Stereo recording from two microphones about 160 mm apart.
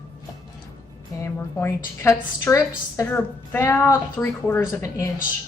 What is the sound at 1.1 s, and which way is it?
A woman's voice, 15° left (ahead or behind).